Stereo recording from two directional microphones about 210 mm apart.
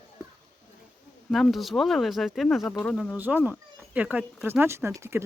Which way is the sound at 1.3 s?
Centre (ahead or behind).